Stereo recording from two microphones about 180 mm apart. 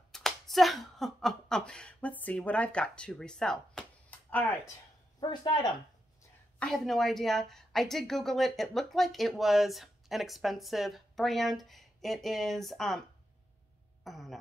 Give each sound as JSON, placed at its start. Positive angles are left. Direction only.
{"t": 0.1, "sound": "speech", "side_deg": 0}
{"t": 5.2, "sound": "speech", "side_deg": 25}
{"t": 6.6, "sound": "a woman's voice", "side_deg": 0}
{"t": 14.0, "sound": "a woman's voice", "side_deg": 0}